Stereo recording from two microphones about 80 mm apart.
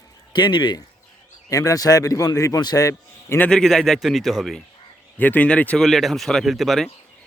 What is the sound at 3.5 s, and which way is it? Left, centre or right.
Speech, centre.